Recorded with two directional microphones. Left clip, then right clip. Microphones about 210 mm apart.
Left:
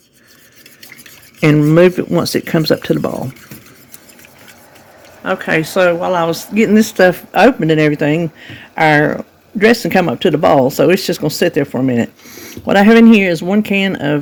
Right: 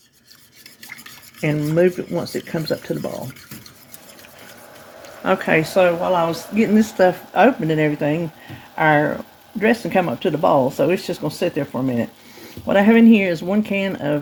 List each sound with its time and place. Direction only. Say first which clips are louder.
1.4 s speech: left 9 dB; 55° left (ahead or behind)
5.2 s speech: left 1 dB; centre (ahead or behind)
5.7 s speech: left 5 dB; 35° left (ahead or behind)